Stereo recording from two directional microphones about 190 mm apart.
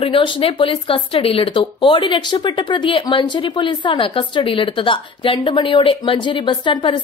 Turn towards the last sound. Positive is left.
turn(degrees=25)  # may be behind; listen again after turning